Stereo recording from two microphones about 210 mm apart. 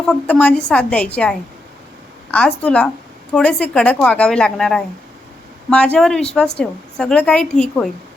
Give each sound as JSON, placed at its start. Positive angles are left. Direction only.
{"t": 0.0, "sound": "a woman's voice", "side_deg": 5}